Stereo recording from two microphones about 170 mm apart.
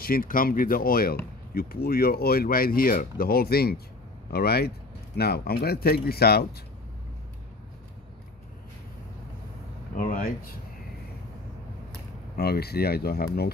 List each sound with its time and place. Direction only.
0.0 s speech: 55° left (ahead or behind)
9.9 s speech: 55° left (ahead or behind)
12.4 s speech: 65° left (ahead or behind)